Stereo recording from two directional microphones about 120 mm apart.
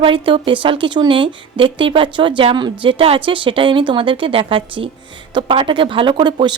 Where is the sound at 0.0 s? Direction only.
45° right (ahead or behind).